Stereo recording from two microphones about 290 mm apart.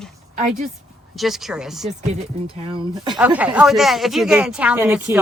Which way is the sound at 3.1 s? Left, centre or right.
Centre.